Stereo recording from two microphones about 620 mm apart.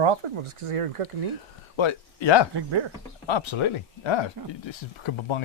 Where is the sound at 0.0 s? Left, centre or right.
Right.